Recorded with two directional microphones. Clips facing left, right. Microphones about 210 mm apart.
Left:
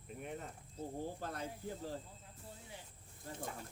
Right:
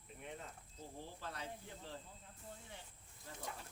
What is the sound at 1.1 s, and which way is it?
Speech, 50° left (ahead or behind).